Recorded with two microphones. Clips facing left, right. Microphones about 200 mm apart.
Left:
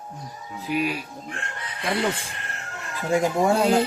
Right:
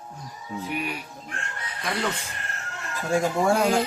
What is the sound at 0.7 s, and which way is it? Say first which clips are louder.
Speech: left 7 dB; 90° left.